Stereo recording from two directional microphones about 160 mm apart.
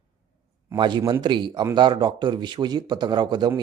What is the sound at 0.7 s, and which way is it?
Speech, 30° right (ahead or behind).